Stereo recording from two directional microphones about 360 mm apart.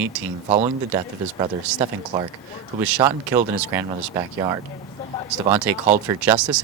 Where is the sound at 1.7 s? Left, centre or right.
Centre.